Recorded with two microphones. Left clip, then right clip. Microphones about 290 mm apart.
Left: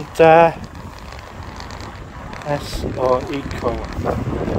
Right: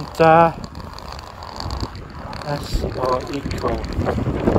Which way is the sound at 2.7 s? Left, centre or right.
Centre.